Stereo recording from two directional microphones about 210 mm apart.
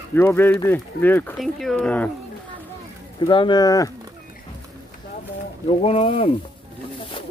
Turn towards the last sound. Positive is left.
turn(degrees=25)  # may be behind; listen again after turning